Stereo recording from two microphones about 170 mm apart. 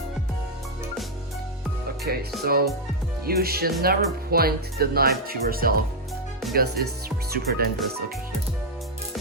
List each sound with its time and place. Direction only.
2.1 s speech: 65° right (ahead or behind)